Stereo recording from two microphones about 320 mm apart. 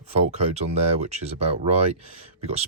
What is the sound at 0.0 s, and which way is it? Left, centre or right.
Speech, centre.